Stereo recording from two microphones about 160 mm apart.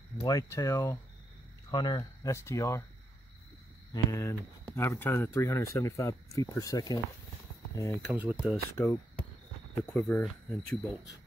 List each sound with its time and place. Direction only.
0.2 s speech: 20° left (ahead or behind)
3.9 s speech: 20° left (ahead or behind)
8.1 s speech: 10° right (ahead or behind)
8.7 s speech: 10° left (ahead or behind)